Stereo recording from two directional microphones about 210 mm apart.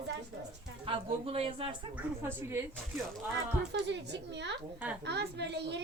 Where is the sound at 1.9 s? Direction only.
10° right (ahead or behind).